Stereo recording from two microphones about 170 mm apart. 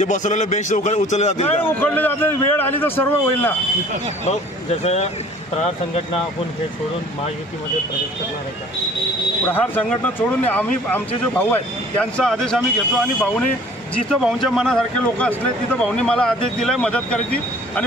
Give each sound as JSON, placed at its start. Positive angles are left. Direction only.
{"t": 0.0, "sound": "a man's voice", "side_deg": 45}
{"t": 1.7, "sound": "a man's voice", "side_deg": 10}
{"t": 4.2, "sound": "speech", "side_deg": 40}
{"t": 9.5, "sound": "a man's voice", "side_deg": 10}